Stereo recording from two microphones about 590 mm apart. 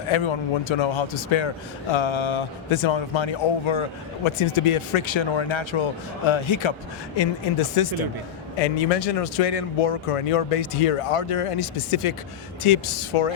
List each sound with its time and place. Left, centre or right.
0.1 s a man's voice: left
8.5 s a man's voice: left